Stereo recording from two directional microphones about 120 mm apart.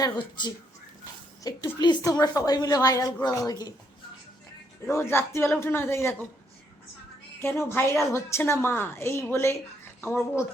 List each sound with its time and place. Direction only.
0.0 s a woman's voice: 40° left (ahead or behind)
4.9 s a woman's voice: 20° left (ahead or behind)
7.4 s a woman's voice: 20° left (ahead or behind)